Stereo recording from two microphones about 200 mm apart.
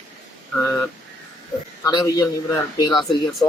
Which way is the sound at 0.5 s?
5° left (ahead or behind).